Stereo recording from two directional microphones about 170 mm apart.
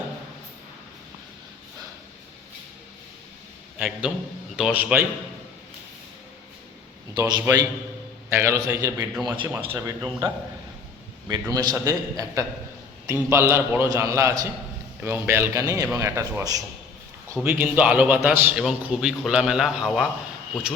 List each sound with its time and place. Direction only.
3.8 s a man's voice: 5° right (ahead or behind)
7.1 s a man's voice: 25° right (ahead or behind)
9.1 s a man's voice: centre (ahead or behind)
9.7 s a man's voice: 20° right (ahead or behind)
17.4 s a man's voice: 10° right (ahead or behind)